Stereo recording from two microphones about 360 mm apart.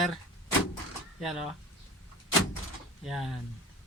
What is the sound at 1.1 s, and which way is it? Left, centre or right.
Speech, centre.